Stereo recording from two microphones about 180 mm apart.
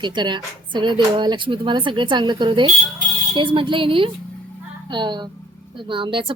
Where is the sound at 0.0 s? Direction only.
25° right (ahead or behind).